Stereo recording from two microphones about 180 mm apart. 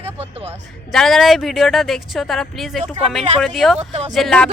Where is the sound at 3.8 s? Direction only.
35° right (ahead or behind).